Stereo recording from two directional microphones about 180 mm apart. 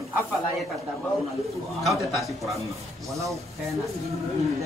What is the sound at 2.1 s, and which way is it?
Speech, centre (ahead or behind).